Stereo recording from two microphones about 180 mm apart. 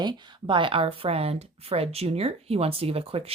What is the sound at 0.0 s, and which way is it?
A woman's voice, 25° right (ahead or behind).